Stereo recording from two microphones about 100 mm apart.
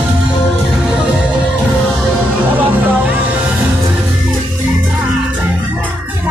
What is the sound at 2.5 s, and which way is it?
Music, 15° right (ahead or behind).